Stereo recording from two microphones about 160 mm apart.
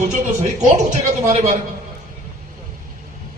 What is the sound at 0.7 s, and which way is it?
Speech, 45° right (ahead or behind).